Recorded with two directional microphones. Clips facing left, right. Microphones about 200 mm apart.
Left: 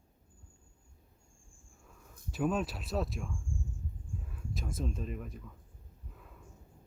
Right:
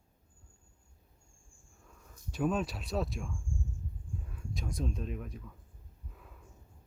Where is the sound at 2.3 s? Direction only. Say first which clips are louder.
Even; centre (ahead or behind).